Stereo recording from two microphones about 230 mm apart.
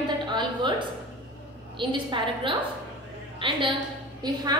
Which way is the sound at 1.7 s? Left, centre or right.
Right.